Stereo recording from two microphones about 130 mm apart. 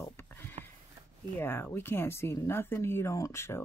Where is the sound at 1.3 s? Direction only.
15° left (ahead or behind).